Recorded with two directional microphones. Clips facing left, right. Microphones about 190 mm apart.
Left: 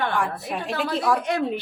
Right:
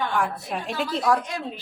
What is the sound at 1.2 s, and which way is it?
Speech, 65° left (ahead or behind).